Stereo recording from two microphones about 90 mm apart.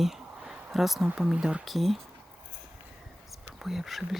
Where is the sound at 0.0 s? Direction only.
5° right (ahead or behind).